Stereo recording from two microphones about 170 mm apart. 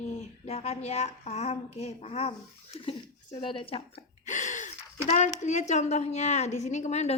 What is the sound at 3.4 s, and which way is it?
Speech, 30° left (ahead or behind).